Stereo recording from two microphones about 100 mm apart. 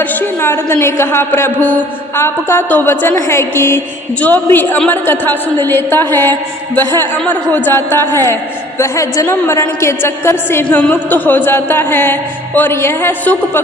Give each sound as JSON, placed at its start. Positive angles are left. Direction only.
{"t": 0.0, "sound": "a woman's voice", "side_deg": 15}